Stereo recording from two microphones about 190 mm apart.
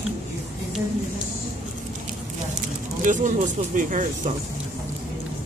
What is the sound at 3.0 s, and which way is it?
Speech, 40° right (ahead or behind).